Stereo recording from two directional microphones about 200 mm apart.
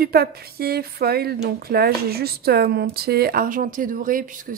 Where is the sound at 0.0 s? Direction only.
50° right (ahead or behind).